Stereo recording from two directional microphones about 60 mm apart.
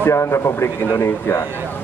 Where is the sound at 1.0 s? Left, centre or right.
Left.